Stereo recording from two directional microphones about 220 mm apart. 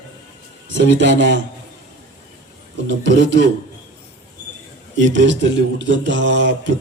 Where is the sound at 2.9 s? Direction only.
55° right (ahead or behind).